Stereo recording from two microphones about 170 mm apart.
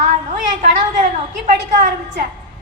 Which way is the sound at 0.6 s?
50° right (ahead or behind).